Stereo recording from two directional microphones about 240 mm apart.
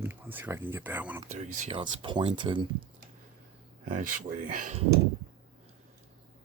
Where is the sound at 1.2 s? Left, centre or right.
Right.